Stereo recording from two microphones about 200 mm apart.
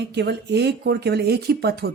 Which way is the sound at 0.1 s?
55° right (ahead or behind).